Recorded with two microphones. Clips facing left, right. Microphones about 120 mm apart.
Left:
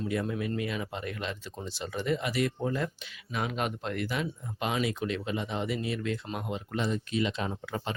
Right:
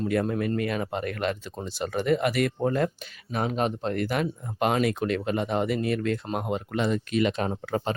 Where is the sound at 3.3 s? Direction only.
40° right (ahead or behind).